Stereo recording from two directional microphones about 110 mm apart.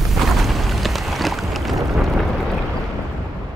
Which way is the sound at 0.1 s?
Centre (ahead or behind).